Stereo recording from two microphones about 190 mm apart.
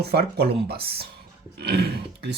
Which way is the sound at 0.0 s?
60° right (ahead or behind).